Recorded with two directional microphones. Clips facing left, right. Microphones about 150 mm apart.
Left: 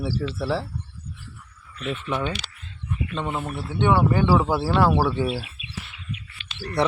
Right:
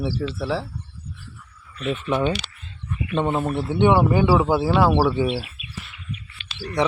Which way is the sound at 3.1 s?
25° right (ahead or behind).